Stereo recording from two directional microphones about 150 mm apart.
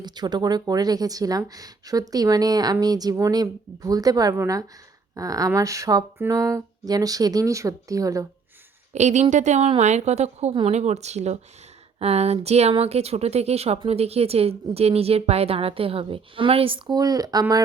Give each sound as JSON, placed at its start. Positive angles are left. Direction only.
{"t": 0.0, "sound": "speech", "side_deg": -30}
{"t": 8.9, "sound": "a woman's voice", "side_deg": -50}